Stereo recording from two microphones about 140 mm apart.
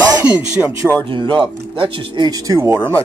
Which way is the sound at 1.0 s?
35° right (ahead or behind).